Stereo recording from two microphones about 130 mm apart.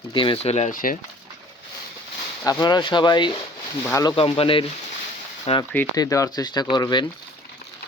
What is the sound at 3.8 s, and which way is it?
Speech, 20° left (ahead or behind).